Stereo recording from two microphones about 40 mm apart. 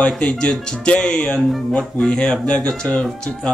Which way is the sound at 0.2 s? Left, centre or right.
Left.